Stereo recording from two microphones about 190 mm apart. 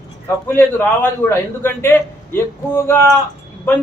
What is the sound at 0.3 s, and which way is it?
A man's voice, 10° left (ahead or behind).